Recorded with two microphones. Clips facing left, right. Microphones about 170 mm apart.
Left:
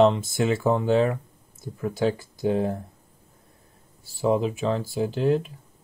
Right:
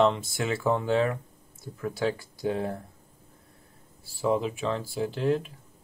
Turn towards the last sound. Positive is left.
turn(degrees=20)  # may be behind; listen again after turning